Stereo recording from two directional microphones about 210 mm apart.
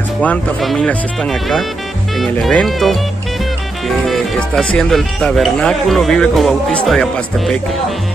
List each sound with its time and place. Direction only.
0.2 s speech: 5° left (ahead or behind)
4.0 s speech: centre (ahead or behind)